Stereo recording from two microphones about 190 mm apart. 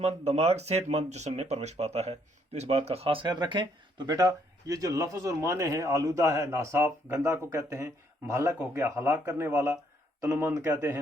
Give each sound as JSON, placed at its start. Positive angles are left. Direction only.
{"t": 0.0, "sound": "speech", "side_deg": -35}